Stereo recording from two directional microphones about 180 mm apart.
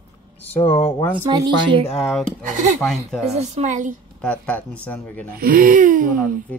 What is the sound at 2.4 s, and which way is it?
Speech, 45° right (ahead or behind).